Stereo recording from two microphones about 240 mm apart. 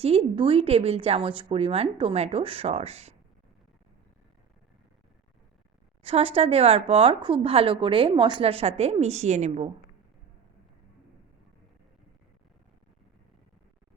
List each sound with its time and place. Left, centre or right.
0.0 s a woman's voice: right
6.0 s a woman's voice: right